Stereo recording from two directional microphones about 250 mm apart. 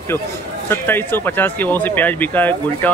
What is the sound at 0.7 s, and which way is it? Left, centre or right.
Speech, centre.